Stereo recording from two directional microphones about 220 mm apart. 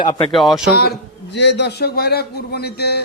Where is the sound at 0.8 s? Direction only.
50° left (ahead or behind).